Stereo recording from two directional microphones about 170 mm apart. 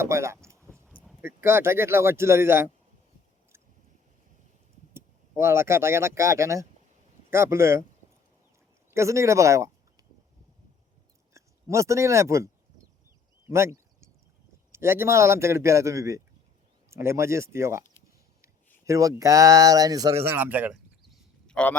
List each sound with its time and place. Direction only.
0.0 s a sound: 15° right (ahead or behind)
1.4 s a man's voice: 15° right (ahead or behind)
4.9 s a man's voice: 15° right (ahead or behind)
8.9 s speech: 15° right (ahead or behind)
11.3 s speech: 15° right (ahead or behind)
13.5 s a sound: 15° right (ahead or behind)
14.7 s a man's voice: 15° right (ahead or behind)
18.9 s speech: 20° right (ahead or behind); by 21.8 s 5° left (ahead or behind)